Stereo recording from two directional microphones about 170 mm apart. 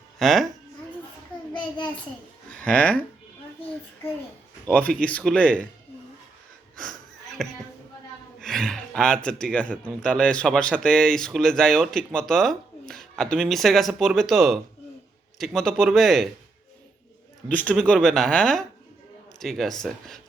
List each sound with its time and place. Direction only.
0.2 s speech: centre (ahead or behind)
1.5 s child singing: 25° left (ahead or behind)
2.6 s speech: 5° left (ahead or behind)
4.7 s speech: 10° left (ahead or behind)
6.7 s wheeze: centre (ahead or behind)
8.4 s speech: centre (ahead or behind)
17.5 s speech: 10° left (ahead or behind)